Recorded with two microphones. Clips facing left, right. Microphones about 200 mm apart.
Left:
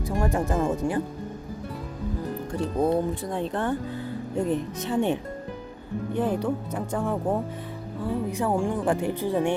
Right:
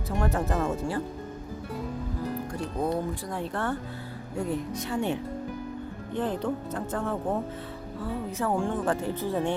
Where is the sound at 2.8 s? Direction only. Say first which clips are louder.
Left 5 dB; 20° left (ahead or behind).